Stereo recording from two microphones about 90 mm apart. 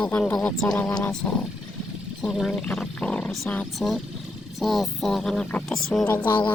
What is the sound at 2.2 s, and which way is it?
Speech, 5° right (ahead or behind).